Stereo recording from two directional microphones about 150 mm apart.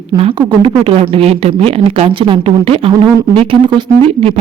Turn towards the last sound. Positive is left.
turn(degrees=-35)  # may be behind; listen again after turning